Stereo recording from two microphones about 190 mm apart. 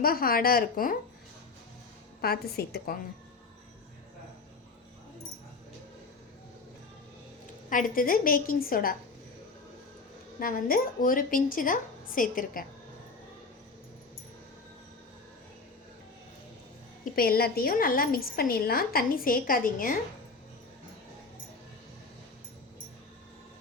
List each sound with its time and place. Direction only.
0.0 s a woman's voice: 50° left (ahead or behind)
2.2 s a woman's voice: 55° left (ahead or behind)
7.7 s a woman's voice: 45° left (ahead or behind)
10.4 s a woman's voice: 50° left (ahead or behind)
17.2 s a woman's voice: 55° left (ahead or behind)